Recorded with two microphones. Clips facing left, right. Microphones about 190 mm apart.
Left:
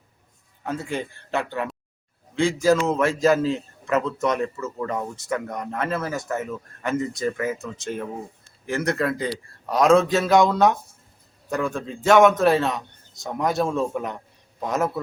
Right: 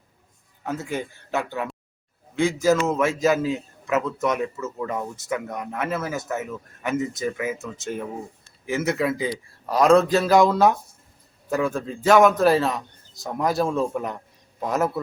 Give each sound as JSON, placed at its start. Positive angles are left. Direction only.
{"t": 0.6, "sound": "a man's voice", "side_deg": -5}